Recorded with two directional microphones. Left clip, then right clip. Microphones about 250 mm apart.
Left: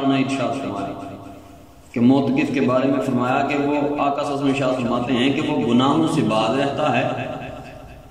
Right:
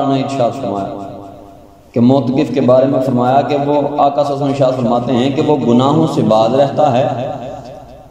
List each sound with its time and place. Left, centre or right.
0.1 s a man's voice: centre
2.0 s a man's voice: centre